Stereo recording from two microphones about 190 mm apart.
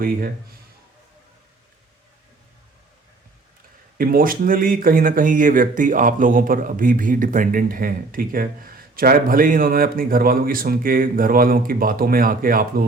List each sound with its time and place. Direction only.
3.9 s speech: 50° right (ahead or behind)